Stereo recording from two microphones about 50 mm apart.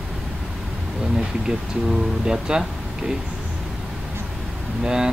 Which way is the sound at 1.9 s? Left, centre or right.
Centre.